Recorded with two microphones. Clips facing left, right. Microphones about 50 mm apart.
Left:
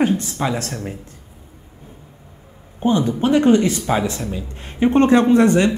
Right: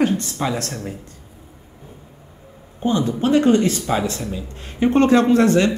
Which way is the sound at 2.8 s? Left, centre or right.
Left.